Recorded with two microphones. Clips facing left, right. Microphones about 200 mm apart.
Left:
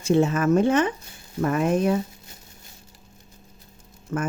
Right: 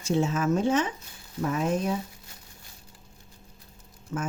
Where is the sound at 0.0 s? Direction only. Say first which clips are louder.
Left 5 dB; 60° left (ahead or behind).